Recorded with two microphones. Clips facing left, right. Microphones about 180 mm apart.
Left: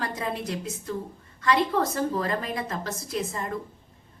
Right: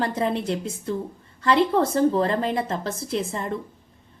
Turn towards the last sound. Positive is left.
turn(degrees=-30)  # may be behind; listen again after turning